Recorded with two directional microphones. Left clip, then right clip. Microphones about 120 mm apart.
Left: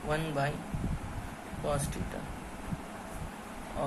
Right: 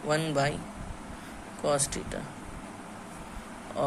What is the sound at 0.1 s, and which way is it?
Speech, 55° right (ahead or behind).